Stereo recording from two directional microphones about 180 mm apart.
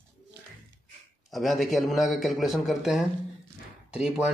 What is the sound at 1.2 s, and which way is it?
A man's voice, centre (ahead or behind).